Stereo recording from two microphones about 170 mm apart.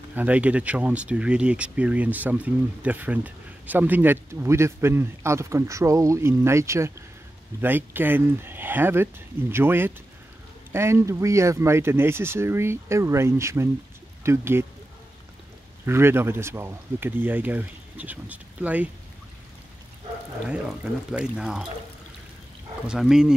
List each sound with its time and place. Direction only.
0.1 s speech: 10° right (ahead or behind)
15.8 s speech: 15° right (ahead or behind)
20.4 s speech: 5° right (ahead or behind)
22.8 s speech: 5° right (ahead or behind)